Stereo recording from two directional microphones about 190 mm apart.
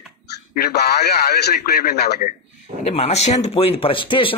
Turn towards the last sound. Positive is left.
turn(degrees=25)  # may be behind; listen again after turning